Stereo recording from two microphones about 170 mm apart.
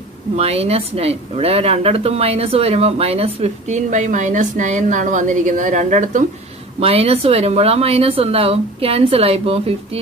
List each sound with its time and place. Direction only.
0.4 s a woman's voice: 35° right (ahead or behind)
6.8 s a woman's voice: 35° right (ahead or behind)